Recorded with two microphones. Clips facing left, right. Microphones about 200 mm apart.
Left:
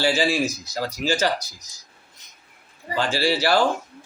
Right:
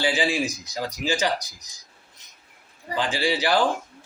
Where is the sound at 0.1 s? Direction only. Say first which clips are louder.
Left 3 dB; 15° right (ahead or behind).